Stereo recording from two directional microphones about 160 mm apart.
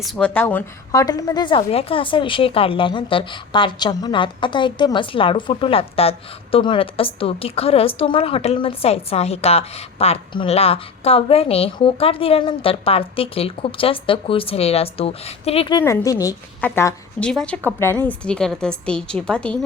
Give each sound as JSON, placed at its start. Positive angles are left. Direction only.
{"t": 0.0, "sound": "a woman's voice", "side_deg": 0}
{"t": 0.3, "sound": "a woman's voice", "side_deg": 10}
{"t": 1.0, "sound": "a woman's voice", "side_deg": 25}
{"t": 15.8, "sound": "a woman's voice", "side_deg": 20}